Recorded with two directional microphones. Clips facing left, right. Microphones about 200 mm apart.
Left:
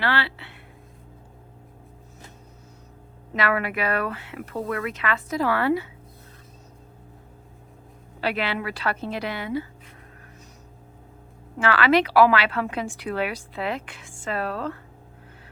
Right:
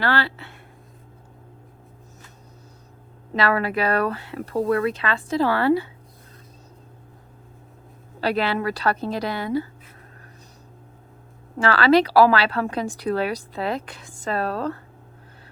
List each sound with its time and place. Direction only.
0.0 s speech: 40° right (ahead or behind)
3.3 s a woman's voice: 35° right (ahead or behind)
8.2 s a woman's voice: 40° right (ahead or behind)
11.6 s a woman's voice: 35° right (ahead or behind)